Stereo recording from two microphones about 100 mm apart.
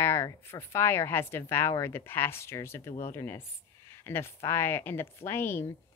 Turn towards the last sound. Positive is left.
turn(degrees=20)  # may be behind; listen again after turning